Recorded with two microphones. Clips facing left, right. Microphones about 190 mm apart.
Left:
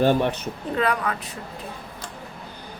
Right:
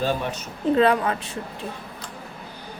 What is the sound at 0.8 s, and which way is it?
Speech, 25° right (ahead or behind).